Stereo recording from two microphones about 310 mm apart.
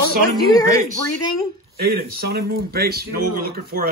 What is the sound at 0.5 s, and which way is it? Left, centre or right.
Speech, centre.